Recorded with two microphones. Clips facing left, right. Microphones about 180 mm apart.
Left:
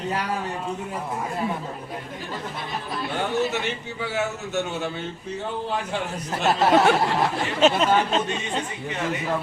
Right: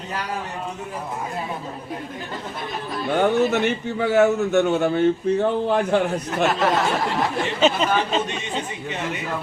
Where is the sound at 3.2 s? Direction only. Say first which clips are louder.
Right 7 dB; 55° right (ahead or behind).